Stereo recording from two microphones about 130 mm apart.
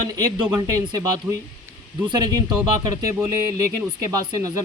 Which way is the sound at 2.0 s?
30° right (ahead or behind).